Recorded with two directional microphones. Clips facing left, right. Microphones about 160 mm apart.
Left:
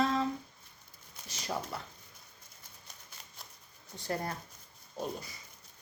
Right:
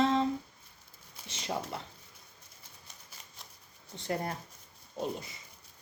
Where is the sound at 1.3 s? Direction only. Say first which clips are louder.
Right 1 dB; 25° right (ahead or behind).